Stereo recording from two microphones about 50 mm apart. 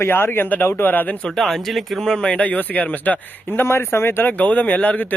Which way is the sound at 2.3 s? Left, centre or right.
Left.